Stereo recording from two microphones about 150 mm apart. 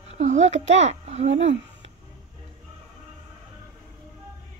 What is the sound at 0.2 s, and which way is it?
A child's voice, 50° right (ahead or behind).